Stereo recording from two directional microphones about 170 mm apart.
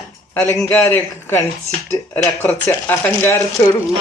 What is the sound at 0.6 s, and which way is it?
Speech, 10° left (ahead or behind).